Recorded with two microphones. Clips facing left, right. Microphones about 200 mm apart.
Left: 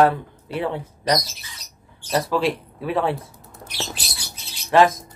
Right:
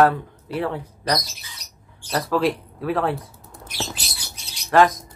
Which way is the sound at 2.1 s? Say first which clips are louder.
Even; centre (ahead or behind).